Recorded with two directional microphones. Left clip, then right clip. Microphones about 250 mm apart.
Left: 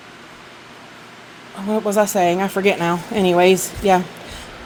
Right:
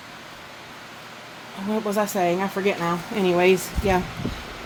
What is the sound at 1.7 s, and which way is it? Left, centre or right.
Speech, left.